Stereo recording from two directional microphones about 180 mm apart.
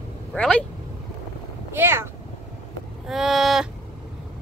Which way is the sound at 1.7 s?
15° right (ahead or behind).